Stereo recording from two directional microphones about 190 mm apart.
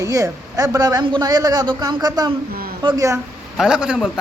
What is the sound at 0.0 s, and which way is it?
A man's voice, 15° right (ahead or behind).